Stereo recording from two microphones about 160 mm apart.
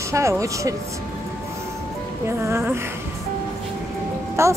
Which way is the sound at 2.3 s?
15° right (ahead or behind).